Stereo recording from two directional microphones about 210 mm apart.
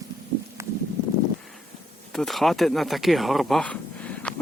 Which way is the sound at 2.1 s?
Centre (ahead or behind).